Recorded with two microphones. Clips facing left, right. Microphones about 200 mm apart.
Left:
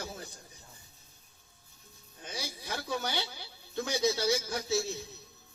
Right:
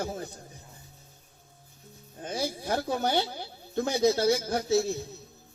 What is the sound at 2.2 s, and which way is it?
Speech, 50° right (ahead or behind).